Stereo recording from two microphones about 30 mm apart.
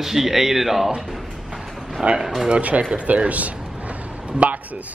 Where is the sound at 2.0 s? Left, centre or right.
Right.